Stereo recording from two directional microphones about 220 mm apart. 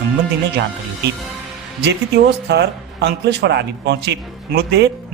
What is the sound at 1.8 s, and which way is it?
Speech, 50° right (ahead or behind).